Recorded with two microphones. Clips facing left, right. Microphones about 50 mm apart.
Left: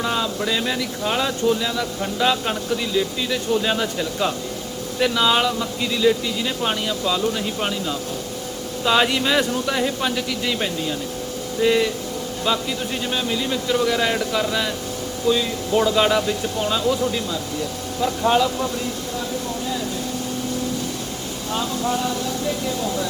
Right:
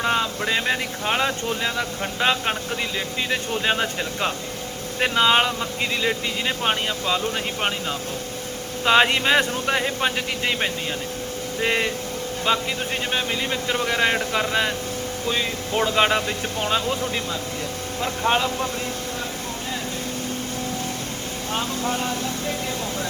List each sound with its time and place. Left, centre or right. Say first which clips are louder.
0.0 s speech: even; right
21.5 s speech: left 3 dB; right